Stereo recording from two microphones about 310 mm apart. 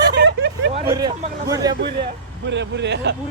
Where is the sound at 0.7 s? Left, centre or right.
Centre.